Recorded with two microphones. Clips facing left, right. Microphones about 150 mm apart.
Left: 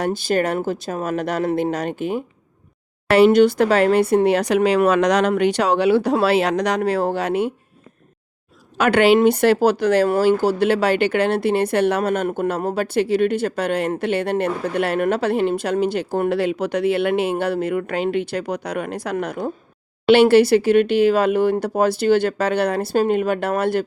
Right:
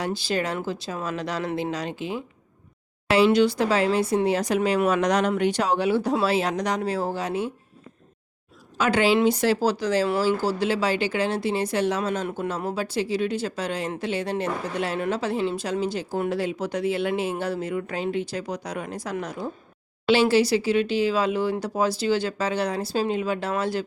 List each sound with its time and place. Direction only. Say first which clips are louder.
0.0 s speech: left 6 dB; 50° left (ahead or behind); by 7.5 s 65° left (ahead or behind)
8.8 s speech: left 6 dB; 60° left (ahead or behind)